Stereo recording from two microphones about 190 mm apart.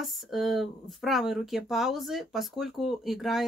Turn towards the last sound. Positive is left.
turn(degrees=0)  # may be behind; listen again after turning